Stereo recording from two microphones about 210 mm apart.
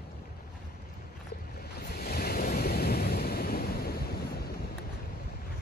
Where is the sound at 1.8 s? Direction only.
50° left (ahead or behind).